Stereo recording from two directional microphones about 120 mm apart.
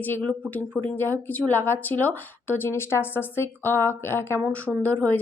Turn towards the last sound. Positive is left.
turn(degrees=10)  # may be behind; listen again after turning